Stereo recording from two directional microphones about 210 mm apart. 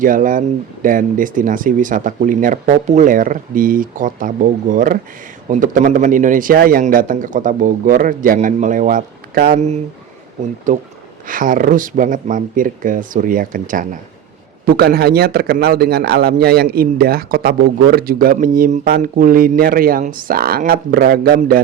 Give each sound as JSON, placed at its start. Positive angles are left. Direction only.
{"t": 0.0, "sound": "speech", "side_deg": -40}
{"t": 11.3, "sound": "a man's voice", "side_deg": -40}